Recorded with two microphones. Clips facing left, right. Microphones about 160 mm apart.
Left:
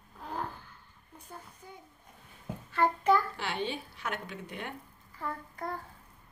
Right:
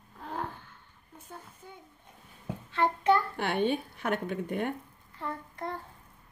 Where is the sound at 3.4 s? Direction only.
55° right (ahead or behind).